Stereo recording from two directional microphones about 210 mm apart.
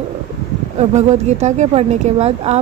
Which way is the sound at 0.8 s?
35° right (ahead or behind).